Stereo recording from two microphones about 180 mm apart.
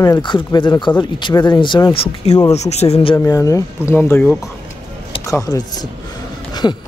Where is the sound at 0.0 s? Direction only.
20° left (ahead or behind).